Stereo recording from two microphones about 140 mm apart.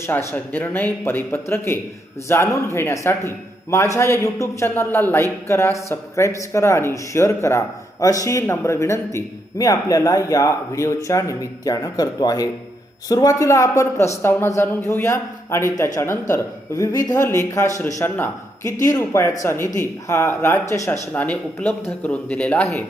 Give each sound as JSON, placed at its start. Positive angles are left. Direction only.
{"t": 0.0, "sound": "speech", "side_deg": 20}